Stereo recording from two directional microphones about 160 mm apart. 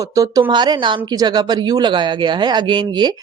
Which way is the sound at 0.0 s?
20° right (ahead or behind).